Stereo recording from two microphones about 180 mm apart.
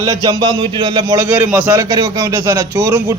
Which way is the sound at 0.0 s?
20° right (ahead or behind).